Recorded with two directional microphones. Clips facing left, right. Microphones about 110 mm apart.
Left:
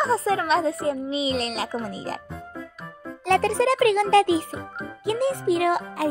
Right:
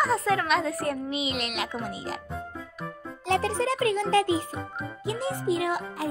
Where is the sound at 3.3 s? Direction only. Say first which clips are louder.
Left 5 dB; 70° left (ahead or behind).